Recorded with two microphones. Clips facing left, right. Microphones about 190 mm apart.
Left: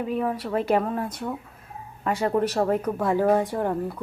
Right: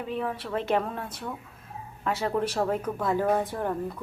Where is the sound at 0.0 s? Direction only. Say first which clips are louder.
Left 5 dB; 5° left (ahead or behind).